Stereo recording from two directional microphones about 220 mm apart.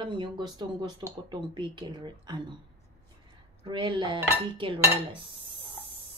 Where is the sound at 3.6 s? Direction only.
20° right (ahead or behind).